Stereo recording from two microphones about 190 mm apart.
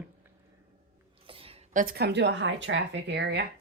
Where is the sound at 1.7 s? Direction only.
45° right (ahead or behind); by 3.5 s 60° right (ahead or behind).